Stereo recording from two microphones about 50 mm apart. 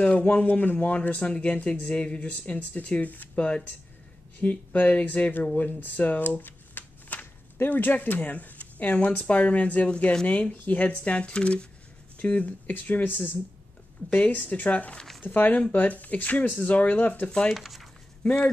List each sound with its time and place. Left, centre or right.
0.0 s speech: centre
0.5 s speech: left
1.2 s speech: left
4.4 s speech: left
5.6 s shuffling cards: left
7.5 s speech: left
15.0 s speech: centre
15.2 s speech: left
17.6 s speech: centre
18.2 s speech: left